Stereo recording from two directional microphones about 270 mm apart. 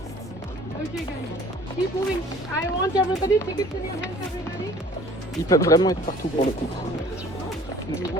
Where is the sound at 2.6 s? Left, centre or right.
Centre.